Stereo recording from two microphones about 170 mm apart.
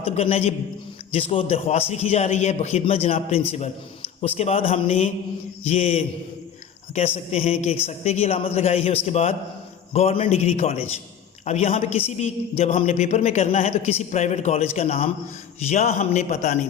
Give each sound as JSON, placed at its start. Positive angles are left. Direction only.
{"t": 0.0, "sound": "a woman's voice", "side_deg": 35}